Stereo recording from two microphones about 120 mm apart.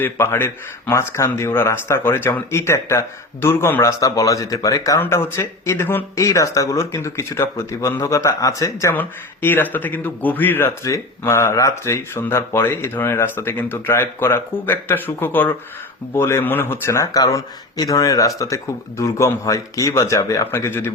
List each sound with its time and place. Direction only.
0.0 s a man's voice: 20° left (ahead or behind)